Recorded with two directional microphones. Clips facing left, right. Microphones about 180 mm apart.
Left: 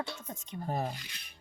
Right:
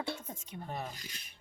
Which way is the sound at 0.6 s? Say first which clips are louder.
Left 7 dB; 40° left (ahead or behind).